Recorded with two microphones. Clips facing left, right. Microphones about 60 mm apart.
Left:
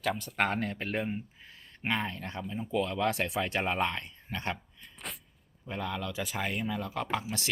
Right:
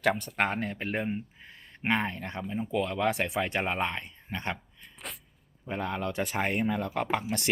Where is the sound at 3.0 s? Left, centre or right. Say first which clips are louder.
Right 2 dB; centre.